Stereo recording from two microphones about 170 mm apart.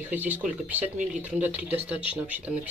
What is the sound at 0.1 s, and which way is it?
Speech, 10° right (ahead or behind).